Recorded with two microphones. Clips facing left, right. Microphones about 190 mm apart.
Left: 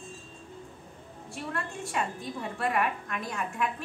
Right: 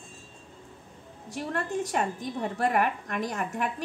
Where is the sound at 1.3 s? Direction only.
40° right (ahead or behind).